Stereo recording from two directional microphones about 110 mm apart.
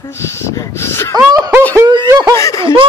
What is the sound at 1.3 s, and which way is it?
Snicker, 35° right (ahead or behind).